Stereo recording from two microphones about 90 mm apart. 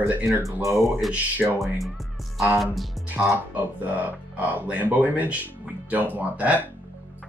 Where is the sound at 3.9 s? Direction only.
20° right (ahead or behind).